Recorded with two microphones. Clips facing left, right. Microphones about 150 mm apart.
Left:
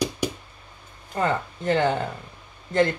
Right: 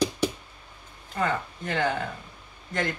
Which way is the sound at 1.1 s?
30° left (ahead or behind).